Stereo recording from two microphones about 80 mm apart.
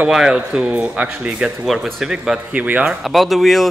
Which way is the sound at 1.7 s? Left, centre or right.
Centre.